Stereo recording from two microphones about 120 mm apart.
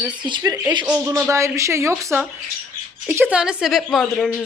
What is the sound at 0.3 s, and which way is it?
Speech, 40° right (ahead or behind).